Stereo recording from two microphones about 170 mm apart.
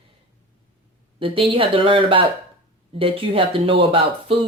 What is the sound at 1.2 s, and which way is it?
Speech, 30° right (ahead or behind).